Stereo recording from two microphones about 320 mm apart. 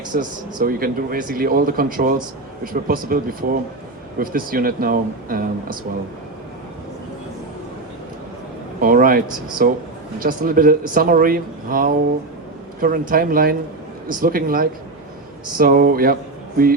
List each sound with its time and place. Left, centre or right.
0.1 s speech: right
8.8 s speech: right